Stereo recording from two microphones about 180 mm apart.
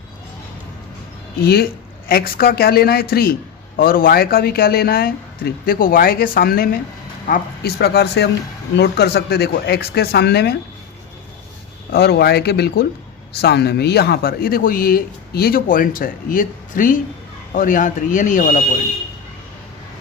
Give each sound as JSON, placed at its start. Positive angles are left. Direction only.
{"t": 1.4, "sound": "speech", "side_deg": 60}
{"t": 11.9, "sound": "speech", "side_deg": 60}